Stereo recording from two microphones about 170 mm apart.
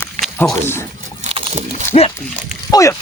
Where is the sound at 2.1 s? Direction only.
15° left (ahead or behind).